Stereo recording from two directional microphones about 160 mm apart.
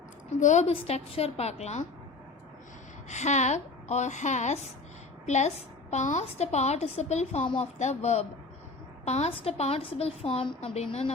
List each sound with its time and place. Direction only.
0.3 s a woman's voice: 50° left (ahead or behind)
3.1 s a woman's voice: 45° left (ahead or behind)